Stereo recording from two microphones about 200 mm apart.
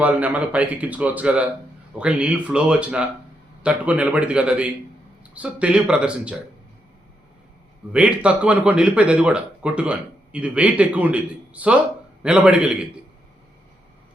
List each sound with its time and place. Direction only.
0.0 s speech: 5° right (ahead or behind)
7.9 s speech: 5° right (ahead or behind)